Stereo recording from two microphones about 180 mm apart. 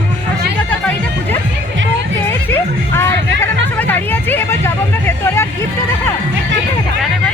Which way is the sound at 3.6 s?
10° left (ahead or behind).